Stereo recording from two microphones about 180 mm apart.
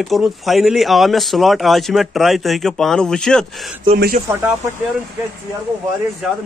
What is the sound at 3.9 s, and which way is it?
Speech, 30° right (ahead or behind).